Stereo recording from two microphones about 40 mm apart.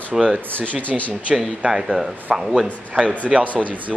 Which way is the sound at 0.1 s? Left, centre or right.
Right.